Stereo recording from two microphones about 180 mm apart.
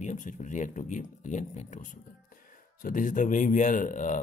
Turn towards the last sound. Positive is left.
turn(degrees=45)  # may be behind; listen again after turning